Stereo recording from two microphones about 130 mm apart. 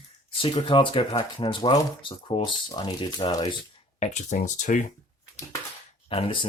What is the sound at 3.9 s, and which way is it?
Speech, 60° left (ahead or behind).